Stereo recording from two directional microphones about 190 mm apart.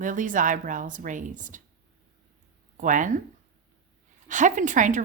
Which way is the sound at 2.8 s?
40° right (ahead or behind).